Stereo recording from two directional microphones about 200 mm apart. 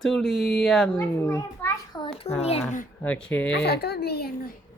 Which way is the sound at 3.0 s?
5° left (ahead or behind).